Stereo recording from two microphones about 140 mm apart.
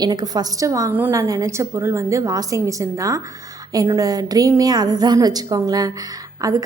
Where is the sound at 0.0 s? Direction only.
30° right (ahead or behind).